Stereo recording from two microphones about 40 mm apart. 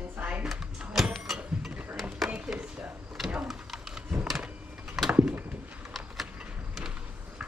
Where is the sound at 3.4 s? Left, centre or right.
Centre.